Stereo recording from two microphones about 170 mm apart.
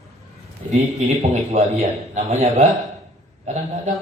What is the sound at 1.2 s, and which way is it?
A man's voice, 40° right (ahead or behind).